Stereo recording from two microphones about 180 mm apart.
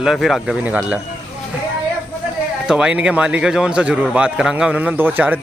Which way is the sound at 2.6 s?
5° right (ahead or behind).